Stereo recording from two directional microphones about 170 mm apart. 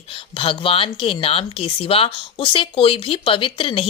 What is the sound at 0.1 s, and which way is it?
Speech, 30° left (ahead or behind).